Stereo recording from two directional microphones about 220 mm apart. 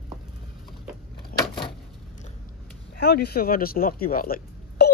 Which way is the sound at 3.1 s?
45° left (ahead or behind).